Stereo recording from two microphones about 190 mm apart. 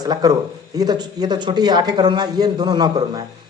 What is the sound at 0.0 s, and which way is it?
A man's voice, 20° right (ahead or behind).